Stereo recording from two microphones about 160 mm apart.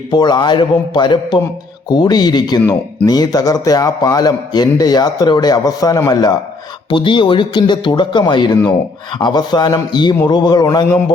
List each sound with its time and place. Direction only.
0.1 s a man's voice: 25° left (ahead or behind)